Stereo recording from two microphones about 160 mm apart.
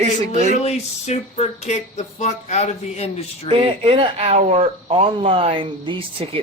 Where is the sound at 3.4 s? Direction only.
40° right (ahead or behind).